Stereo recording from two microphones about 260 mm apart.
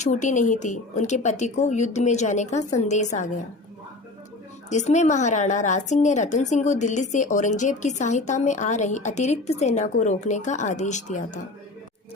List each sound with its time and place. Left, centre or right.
0.0 s a woman's voice: left
4.7 s a woman's voice: left